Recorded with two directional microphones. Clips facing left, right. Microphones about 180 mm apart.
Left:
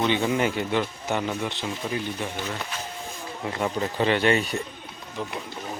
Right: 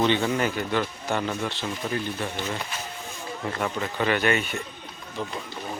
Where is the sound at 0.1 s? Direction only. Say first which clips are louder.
Left 1 dB; 15° left (ahead or behind).